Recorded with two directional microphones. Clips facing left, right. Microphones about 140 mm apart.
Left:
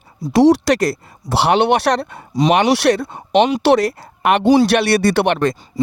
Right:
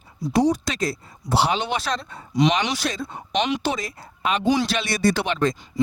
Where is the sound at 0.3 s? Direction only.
80° left.